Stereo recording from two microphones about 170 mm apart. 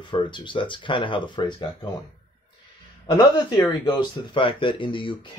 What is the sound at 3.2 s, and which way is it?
Speech, 25° left (ahead or behind).